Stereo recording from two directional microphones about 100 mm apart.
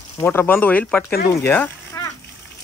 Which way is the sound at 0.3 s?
20° left (ahead or behind).